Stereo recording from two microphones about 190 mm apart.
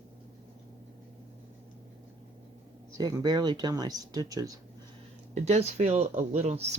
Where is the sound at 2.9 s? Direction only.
20° right (ahead or behind).